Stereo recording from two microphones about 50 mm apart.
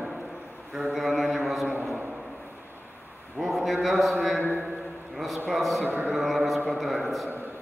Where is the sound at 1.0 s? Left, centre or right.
Centre.